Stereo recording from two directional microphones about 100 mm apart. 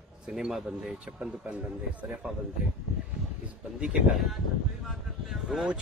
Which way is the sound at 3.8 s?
5° right (ahead or behind).